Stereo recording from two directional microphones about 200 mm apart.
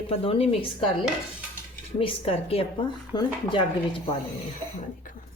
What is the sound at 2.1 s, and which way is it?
Speech, 30° left (ahead or behind).